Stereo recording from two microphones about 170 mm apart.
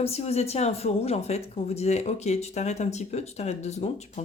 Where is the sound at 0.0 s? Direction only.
35° left (ahead or behind).